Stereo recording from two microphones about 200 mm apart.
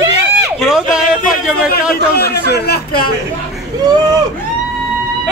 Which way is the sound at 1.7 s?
50° left (ahead or behind).